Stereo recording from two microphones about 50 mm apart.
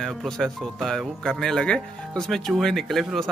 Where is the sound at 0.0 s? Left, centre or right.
Centre.